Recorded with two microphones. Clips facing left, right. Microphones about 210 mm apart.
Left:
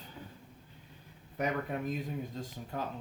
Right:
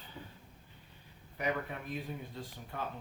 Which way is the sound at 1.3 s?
45° left (ahead or behind).